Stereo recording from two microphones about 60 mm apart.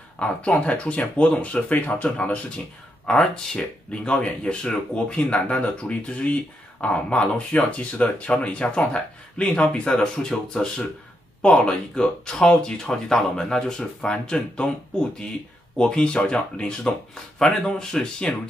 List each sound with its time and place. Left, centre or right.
0.2 s speech: centre
3.1 s speech: centre